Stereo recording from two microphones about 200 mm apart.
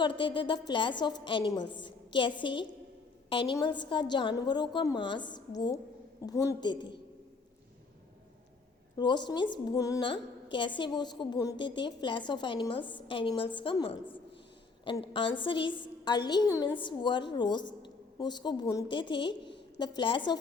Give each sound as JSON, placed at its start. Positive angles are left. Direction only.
{"t": 0.0, "sound": "a woman's voice", "side_deg": 25}
{"t": 9.0, "sound": "a woman's voice", "side_deg": 20}